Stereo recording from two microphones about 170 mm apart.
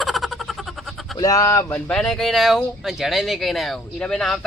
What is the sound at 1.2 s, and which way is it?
Speech, 20° left (ahead or behind).